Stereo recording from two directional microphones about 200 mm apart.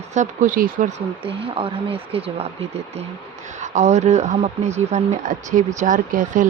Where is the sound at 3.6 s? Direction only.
35° right (ahead or behind).